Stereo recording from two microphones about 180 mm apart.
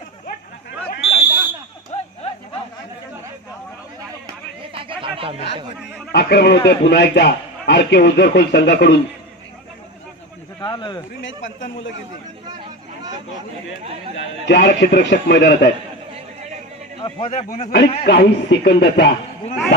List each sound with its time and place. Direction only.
1.2 s fire alarm: 10° right (ahead or behind)
1.9 s a sound: 35° left (ahead or behind)
4.7 s chatter: 30° right (ahead or behind)
6.1 s a man's voice: 65° left (ahead or behind)
10.6 s speech: 25° left (ahead or behind)
11.1 s a man's voice: 90° left
12.4 s a sound: 25° right (ahead or behind)
14.4 s a man's voice: 75° left (ahead or behind)
17.3 s a man's voice: 40° left (ahead or behind)
18.0 s a man's voice: 65° left (ahead or behind)